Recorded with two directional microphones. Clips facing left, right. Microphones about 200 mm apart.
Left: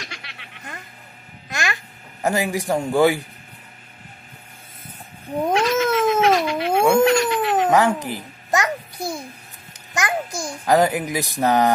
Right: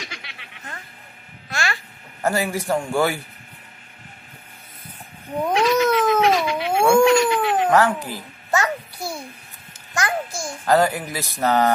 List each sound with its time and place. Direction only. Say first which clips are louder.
0.0 s a sound: right 1 dB; centre (ahead or behind)
1.5 s babbling: even; 20° left (ahead or behind)
2.2 s a child's voice: left 1 dB; 15° left (ahead or behind)
5.5 s cat: right 2 dB; centre (ahead or behind)
7.7 s a child's voice: left 1 dB; 20° left (ahead or behind)